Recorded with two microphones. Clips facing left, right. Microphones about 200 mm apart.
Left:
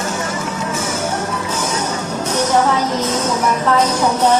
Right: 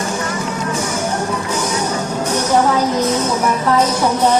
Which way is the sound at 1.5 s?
10° right (ahead or behind).